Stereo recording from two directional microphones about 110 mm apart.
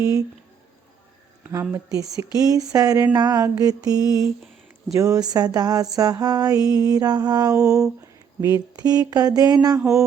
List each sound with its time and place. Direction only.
0.0 s speech: 30° right (ahead or behind)
1.7 s mantra: 30° right (ahead or behind)